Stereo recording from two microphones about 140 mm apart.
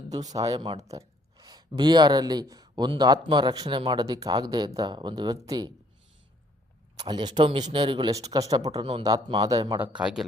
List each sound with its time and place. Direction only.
0.3 s speech: 25° right (ahead or behind)
0.8 s speech: 50° right (ahead or behind)
1.4 s speech: 30° right (ahead or behind)
7.0 s speech: 35° right (ahead or behind)
8.8 s speech: 40° right (ahead or behind)
9.0 s speech: 25° right (ahead or behind)
10.0 s speech: 5° right (ahead or behind)